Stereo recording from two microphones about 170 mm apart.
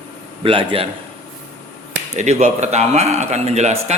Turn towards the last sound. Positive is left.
turn(degrees=-40)  # may be behind; listen again after turning